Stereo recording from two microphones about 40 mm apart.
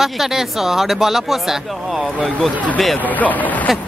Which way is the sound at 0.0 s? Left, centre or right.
Centre.